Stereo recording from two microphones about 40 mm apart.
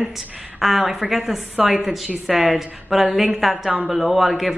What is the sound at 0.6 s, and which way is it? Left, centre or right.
Speech, centre.